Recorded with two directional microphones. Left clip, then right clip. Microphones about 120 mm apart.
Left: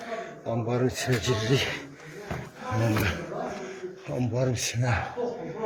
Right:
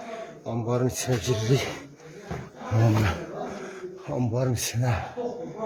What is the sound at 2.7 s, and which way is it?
Speech, 90° right.